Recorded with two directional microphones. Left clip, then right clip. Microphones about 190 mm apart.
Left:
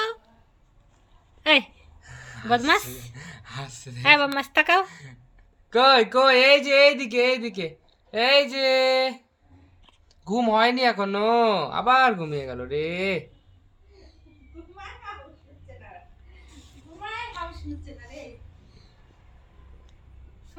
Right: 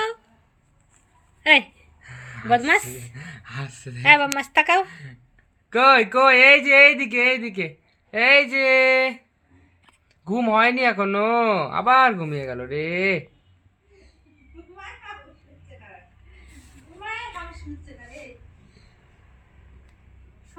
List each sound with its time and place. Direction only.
1.5 s a sound: centre (ahead or behind)
2.0 s a sound: 25° right (ahead or behind)
2.5 s a woman's voice: centre (ahead or behind)
3.0 s speech: 25° right (ahead or behind)
4.0 s a woman's voice: centre (ahead or behind)
4.9 s speech: 25° right (ahead or behind)
10.3 s speech: 30° right (ahead or behind)